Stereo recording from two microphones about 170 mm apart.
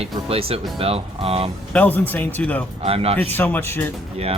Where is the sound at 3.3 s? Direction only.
10° left (ahead or behind).